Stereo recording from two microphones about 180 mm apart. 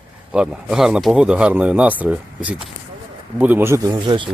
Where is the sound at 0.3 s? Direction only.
5° right (ahead or behind).